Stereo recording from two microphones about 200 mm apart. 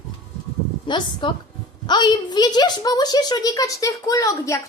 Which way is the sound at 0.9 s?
25° left (ahead or behind).